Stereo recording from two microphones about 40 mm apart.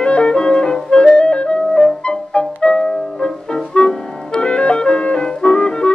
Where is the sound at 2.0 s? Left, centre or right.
Left.